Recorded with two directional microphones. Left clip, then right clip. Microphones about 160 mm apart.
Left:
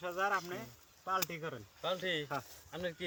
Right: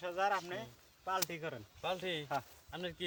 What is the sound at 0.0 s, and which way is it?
Speech, 35° right (ahead or behind).